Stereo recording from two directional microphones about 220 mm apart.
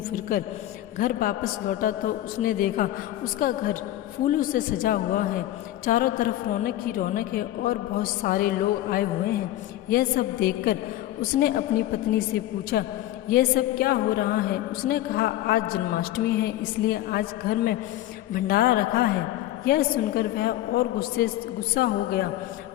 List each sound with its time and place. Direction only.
0.9 s a woman's voice: 40° left (ahead or behind)